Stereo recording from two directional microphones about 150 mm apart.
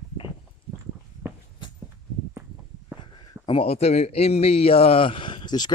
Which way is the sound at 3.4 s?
40° left (ahead or behind).